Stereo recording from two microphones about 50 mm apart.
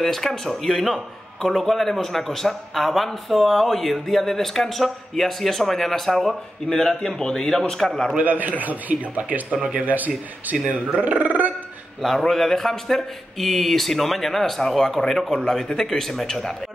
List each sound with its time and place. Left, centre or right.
0.0 s a man's voice: centre
8.2 s speech: right
12.0 s a man's voice: centre